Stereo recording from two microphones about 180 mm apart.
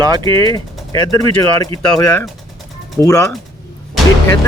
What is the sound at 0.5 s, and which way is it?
Speech, 20° left (ahead or behind).